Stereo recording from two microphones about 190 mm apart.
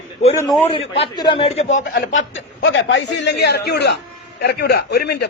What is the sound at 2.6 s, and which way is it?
A man's voice, 65° left (ahead or behind).